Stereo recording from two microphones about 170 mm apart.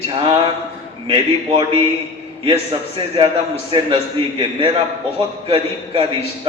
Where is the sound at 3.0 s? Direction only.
30° right (ahead or behind).